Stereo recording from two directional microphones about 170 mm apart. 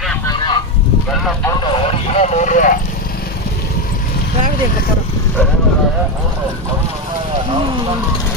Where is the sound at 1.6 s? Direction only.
40° left (ahead or behind).